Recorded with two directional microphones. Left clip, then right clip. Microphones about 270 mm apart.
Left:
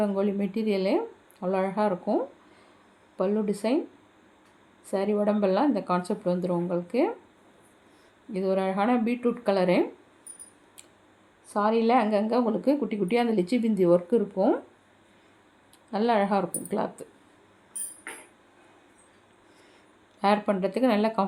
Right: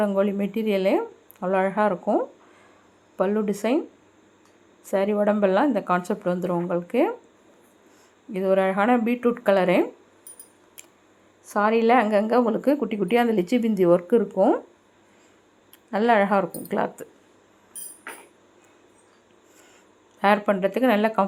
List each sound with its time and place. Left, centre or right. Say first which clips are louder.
0.0 s speech: right 4 dB; centre
4.9 s speech: right 4 dB; centre
8.3 s speech: right 6 dB; centre
11.4 s a woman's voice: right 4 dB; centre
15.9 s speech: right 5 dB; centre
20.2 s speech: right 4 dB; centre